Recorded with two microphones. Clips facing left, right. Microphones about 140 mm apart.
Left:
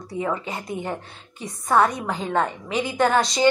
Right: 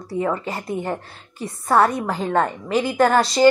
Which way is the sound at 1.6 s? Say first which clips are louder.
Right 2 dB; 5° right (ahead or behind).